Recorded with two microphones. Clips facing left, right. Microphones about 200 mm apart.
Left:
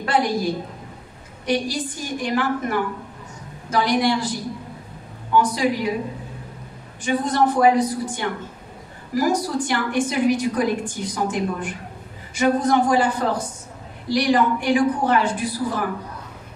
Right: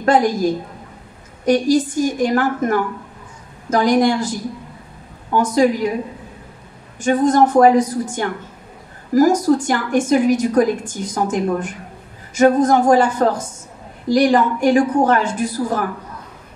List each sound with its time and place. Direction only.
0.0 s a woman's voice: 45° right (ahead or behind)
7.0 s a woman's voice: 45° right (ahead or behind)